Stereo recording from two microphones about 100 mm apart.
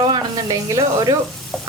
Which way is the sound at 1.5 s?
5° left (ahead or behind).